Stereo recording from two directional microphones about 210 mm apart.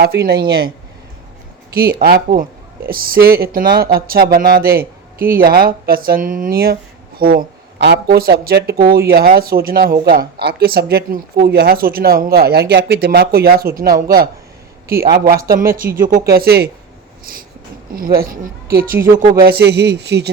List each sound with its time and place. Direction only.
0.1 s speech: 50° right (ahead or behind)
1.7 s speech: 50° right (ahead or behind)
17.9 s speech: 45° right (ahead or behind)
18.9 s speech: 15° right (ahead or behind)
19.4 s speech: 50° right (ahead or behind)